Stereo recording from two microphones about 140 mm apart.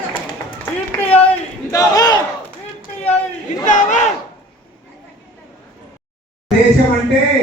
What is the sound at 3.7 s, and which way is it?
Battle cry, 65° left (ahead or behind).